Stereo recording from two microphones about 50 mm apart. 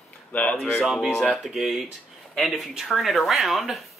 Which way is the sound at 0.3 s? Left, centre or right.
Left.